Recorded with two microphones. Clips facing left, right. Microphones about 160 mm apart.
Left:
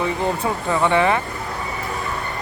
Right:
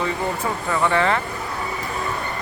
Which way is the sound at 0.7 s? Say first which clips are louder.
Left 2 dB; 15° left (ahead or behind).